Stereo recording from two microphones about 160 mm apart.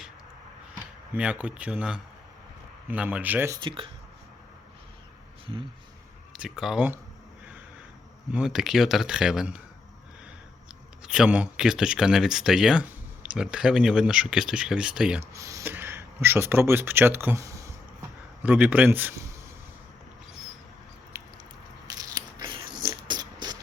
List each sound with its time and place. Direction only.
1.1 s speech: 5° right (ahead or behind)
3.6 s speech: 30° right (ahead or behind)
6.4 s speech: 5° right (ahead or behind)
8.3 s speech: 5° right (ahead or behind)
11.0 s speech: 5° right (ahead or behind)
15.2 s speech: 20° right (ahead or behind)
21.9 s biting: 20° right (ahead or behind)
23.0 s music: 25° right (ahead or behind)